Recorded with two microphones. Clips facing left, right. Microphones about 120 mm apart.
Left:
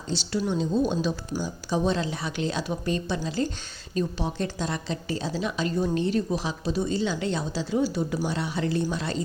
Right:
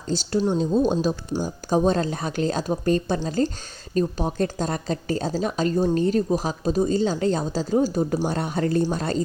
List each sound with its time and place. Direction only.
0.1 s a woman's voice: 45° right (ahead or behind)